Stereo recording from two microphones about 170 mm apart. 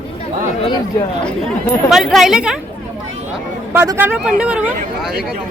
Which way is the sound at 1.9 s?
Centre (ahead or behind).